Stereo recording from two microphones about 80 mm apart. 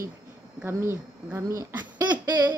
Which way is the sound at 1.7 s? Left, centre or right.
Right.